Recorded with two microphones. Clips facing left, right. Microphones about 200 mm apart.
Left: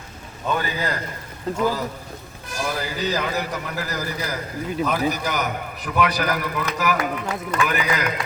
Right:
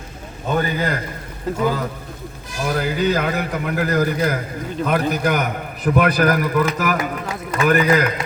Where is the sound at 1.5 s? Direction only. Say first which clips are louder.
Right 2 dB; centre (ahead or behind).